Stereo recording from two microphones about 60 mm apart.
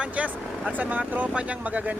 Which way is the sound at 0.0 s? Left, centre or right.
Centre.